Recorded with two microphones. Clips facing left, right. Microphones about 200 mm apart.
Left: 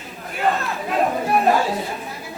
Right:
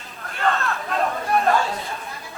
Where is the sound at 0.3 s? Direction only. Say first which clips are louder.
Left 1 dB; 15° left (ahead or behind).